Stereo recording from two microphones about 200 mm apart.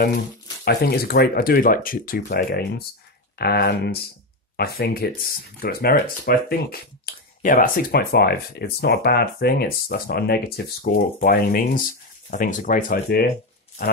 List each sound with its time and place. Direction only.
0.7 s speech: 50° left (ahead or behind)
7.1 s a sound: 50° left (ahead or behind)
7.4 s speech: 45° left (ahead or behind)